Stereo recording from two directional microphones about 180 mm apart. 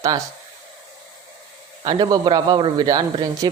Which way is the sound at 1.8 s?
20° right (ahead or behind).